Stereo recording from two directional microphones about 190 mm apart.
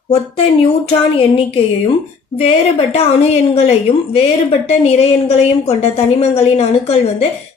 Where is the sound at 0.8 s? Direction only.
30° left (ahead or behind).